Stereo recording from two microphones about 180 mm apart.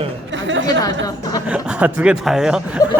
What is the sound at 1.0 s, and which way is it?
Speech, 20° left (ahead or behind).